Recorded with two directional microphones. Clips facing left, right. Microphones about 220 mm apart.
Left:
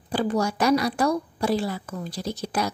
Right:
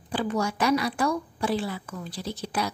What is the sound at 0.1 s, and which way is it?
Speech, 40° left (ahead or behind).